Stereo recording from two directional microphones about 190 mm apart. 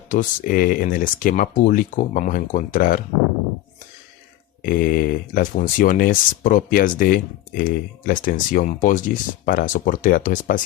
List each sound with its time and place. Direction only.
0.1 s speech: 45° left (ahead or behind)
4.6 s speech: 50° left (ahead or behind)